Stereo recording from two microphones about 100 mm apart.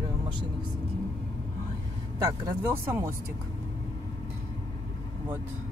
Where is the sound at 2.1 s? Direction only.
30° right (ahead or behind).